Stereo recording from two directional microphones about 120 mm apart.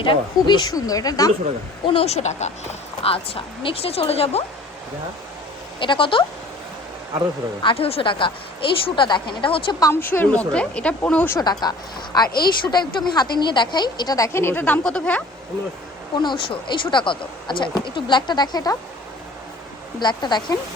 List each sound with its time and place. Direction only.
0.0 s speech: 40° left (ahead or behind)
1.9 s speech: 55° left (ahead or behind)
5.8 s a woman's voice: 45° left (ahead or behind)
7.6 s a woman's voice: 50° left (ahead or behind)
9.8 s speech: 20° left (ahead or behind)
11.3 s speech: 35° left (ahead or behind); by 15.2 s 5° left (ahead or behind)
16.1 s speech: 40° left (ahead or behind)
20.0 s speech: 40° left (ahead or behind)